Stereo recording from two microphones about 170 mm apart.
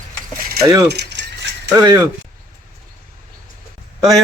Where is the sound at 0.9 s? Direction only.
80° right.